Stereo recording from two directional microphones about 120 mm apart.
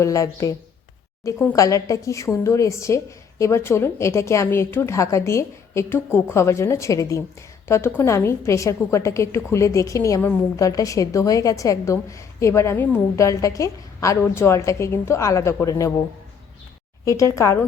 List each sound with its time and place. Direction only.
0.0 s a woman's voice: 25° left (ahead or behind)
1.5 s a woman's voice: 25° left (ahead or behind)
17.1 s a woman's voice: 25° left (ahead or behind)